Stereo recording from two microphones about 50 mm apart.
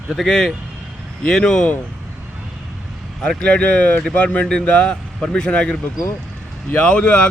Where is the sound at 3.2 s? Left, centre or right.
Centre.